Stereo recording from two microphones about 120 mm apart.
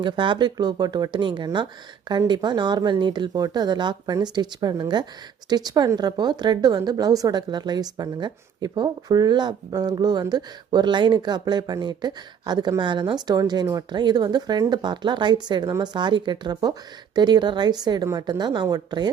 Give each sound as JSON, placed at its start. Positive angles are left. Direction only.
{"t": 0.0, "sound": "a woman's voice", "side_deg": -40}